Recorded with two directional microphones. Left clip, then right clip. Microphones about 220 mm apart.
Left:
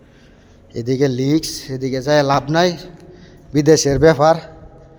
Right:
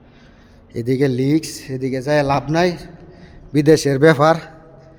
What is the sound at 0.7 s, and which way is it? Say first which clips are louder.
Speech: even; 15° right (ahead or behind).